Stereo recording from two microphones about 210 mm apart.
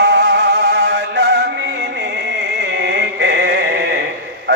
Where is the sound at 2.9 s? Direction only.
55° right (ahead or behind).